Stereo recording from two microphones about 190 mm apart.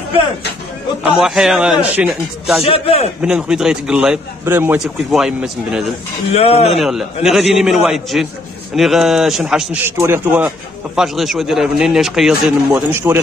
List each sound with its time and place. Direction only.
1.0 s a man's voice: centre (ahead or behind)
2.6 s a man's voice: 30° left (ahead or behind)
3.2 s a man's voice: 5° right (ahead or behind)
6.3 s a man's voice: 30° left (ahead or behind)
6.7 s a man's voice: centre (ahead or behind)